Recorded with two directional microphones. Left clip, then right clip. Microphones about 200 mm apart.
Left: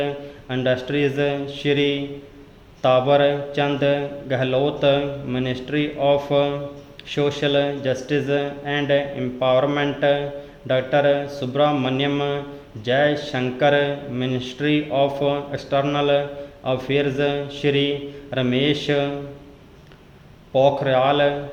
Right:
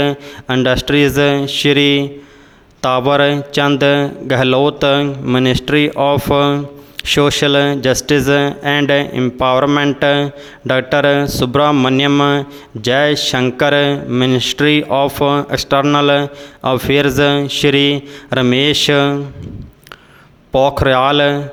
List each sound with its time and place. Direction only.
0.0 s speech: 40° right (ahead or behind)
20.5 s speech: 45° right (ahead or behind)